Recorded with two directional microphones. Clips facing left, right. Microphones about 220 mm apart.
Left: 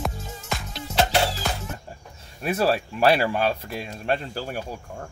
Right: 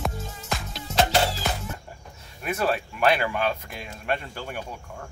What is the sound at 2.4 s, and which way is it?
Speech, 30° left (ahead or behind).